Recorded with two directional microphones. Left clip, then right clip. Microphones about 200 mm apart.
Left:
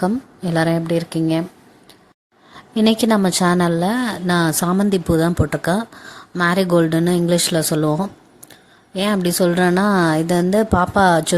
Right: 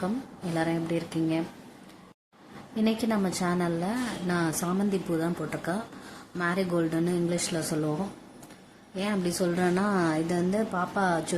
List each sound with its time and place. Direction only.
0.5 s a woman's voice: 45° left (ahead or behind)
2.7 s a woman's voice: 50° left (ahead or behind)